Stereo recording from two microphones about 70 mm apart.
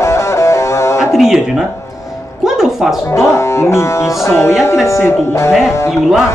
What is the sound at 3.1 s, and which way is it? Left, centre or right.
Music, left.